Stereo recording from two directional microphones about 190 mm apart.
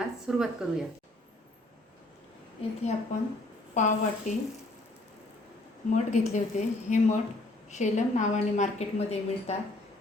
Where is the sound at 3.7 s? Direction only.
40° left (ahead or behind).